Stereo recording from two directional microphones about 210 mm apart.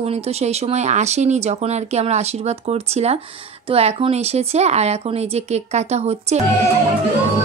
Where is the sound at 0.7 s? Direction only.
35° right (ahead or behind).